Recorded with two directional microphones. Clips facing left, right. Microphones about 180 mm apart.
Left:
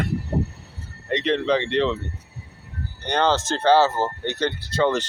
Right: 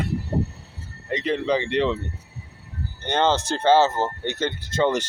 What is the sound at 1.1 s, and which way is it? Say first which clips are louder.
Speech: left 2 dB; 10° right (ahead or behind).